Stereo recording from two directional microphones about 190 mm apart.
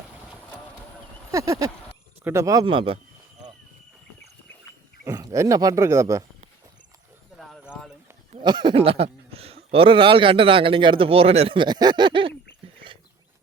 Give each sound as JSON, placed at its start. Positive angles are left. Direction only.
{"t": 1.3, "sound": "speech", "side_deg": -20}
{"t": 5.0, "sound": "speech", "side_deg": -15}
{"t": 7.3, "sound": "a sound", "side_deg": 0}
{"t": 8.4, "sound": "speech", "side_deg": -25}